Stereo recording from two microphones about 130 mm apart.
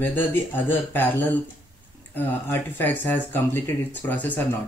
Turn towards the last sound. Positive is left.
turn(degrees=15)  # may be behind; listen again after turning